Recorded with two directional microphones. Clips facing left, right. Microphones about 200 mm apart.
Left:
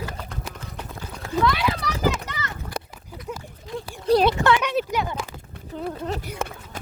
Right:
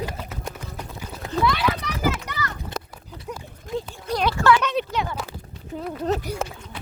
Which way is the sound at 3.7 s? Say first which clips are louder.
Right 4 dB; 45° right (ahead or behind).